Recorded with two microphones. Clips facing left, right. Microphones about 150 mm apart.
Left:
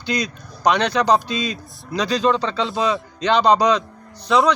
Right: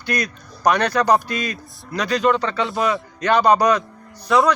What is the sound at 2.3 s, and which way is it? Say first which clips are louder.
Speech: right 2 dB; centre (ahead or behind).